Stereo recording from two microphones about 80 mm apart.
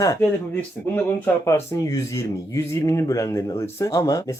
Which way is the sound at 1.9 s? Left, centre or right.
Left.